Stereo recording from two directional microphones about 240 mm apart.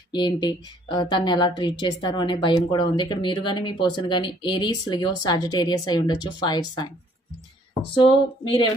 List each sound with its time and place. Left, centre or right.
0.1 s a woman's voice: centre
7.9 s a woman's voice: centre